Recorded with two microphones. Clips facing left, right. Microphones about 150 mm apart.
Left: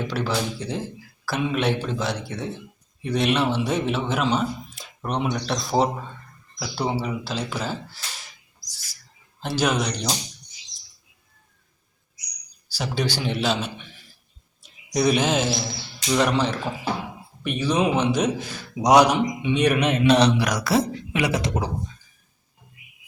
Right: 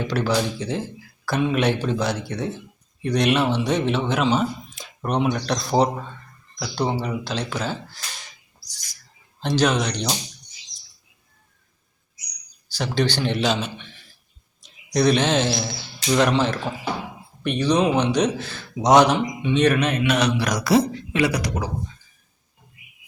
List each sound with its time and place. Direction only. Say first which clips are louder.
0.0 s speech: right 3 dB; centre (ahead or behind)
8.6 s bird: even; 5° left (ahead or behind)
9.4 s speech: right 3 dB; 10° left (ahead or behind)
12.7 s a man's voice: right 3 dB; 5° left (ahead or behind)
20.1 s speech: left 6 dB; 30° left (ahead or behind)
20.4 s speech: right 3 dB; 5° left (ahead or behind)
21.1 s speech: right 2 dB; 20° left (ahead or behind)